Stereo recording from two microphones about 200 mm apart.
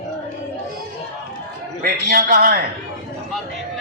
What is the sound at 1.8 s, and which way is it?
Speech, 45° right (ahead or behind).